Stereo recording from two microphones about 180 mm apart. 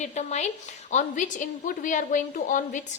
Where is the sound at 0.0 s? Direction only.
40° left (ahead or behind).